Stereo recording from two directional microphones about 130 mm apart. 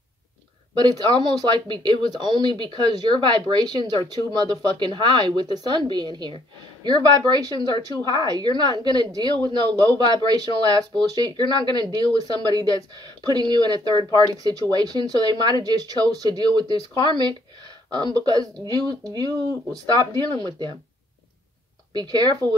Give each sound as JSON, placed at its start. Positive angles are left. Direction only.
{"t": 0.7, "sound": "a woman's voice", "side_deg": -30}
{"t": 2.7, "sound": "speech", "side_deg": 45}
{"t": 3.2, "sound": "a woman's voice", "side_deg": -35}
{"t": 21.9, "sound": "a woman's voice", "side_deg": -30}